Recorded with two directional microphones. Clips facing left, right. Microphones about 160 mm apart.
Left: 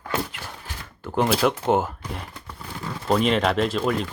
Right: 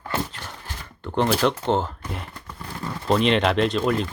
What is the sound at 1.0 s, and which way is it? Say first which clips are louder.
Speech: even; 5° left (ahead or behind).